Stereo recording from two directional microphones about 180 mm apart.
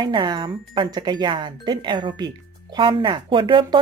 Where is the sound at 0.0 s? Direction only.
25° right (ahead or behind).